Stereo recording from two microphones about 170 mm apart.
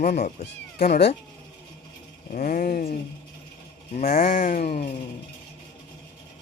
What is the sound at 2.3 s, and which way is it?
Speech, 50° left (ahead or behind).